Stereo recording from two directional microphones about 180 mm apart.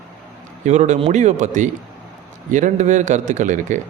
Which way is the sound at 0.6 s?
40° right (ahead or behind).